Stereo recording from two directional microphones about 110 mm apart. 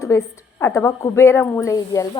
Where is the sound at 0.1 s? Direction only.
30° left (ahead or behind).